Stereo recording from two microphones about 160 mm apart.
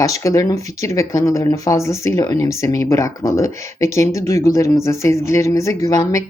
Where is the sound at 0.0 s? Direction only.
20° left (ahead or behind).